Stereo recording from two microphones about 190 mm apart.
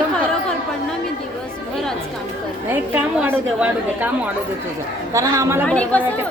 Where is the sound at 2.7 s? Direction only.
10° right (ahead or behind).